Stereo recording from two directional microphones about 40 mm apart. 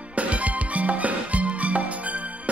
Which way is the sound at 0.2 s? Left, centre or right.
Right.